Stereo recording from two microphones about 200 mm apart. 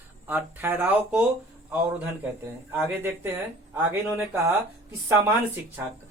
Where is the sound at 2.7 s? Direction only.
10° right (ahead or behind).